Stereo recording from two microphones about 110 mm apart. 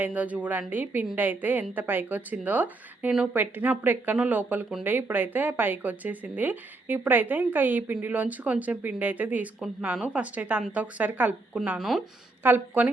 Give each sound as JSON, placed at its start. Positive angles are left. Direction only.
{"t": 0.0, "sound": "speech", "side_deg": -15}
{"t": 11.8, "sound": "speech", "side_deg": 0}
{"t": 12.4, "sound": "speech", "side_deg": -20}